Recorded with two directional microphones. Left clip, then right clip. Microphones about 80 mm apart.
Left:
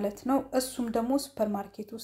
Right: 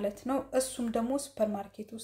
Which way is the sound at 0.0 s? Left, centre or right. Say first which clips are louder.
Left 3 dB; left.